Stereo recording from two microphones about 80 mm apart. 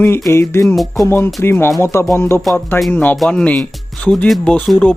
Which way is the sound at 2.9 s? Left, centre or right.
Left.